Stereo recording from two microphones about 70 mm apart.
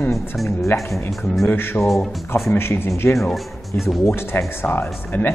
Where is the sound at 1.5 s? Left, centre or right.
Left.